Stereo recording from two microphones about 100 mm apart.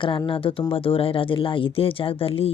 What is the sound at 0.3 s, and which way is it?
Speech, 65° left (ahead or behind).